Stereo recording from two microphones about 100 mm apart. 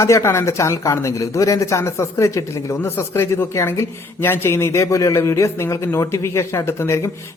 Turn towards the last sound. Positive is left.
turn(degrees=30)  # may be behind; listen again after turning